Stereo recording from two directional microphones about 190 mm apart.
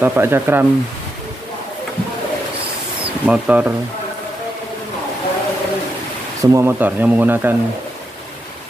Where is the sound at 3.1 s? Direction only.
5° right (ahead or behind).